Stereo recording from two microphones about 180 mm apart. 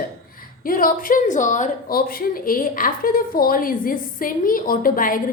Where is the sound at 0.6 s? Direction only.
50° left (ahead or behind).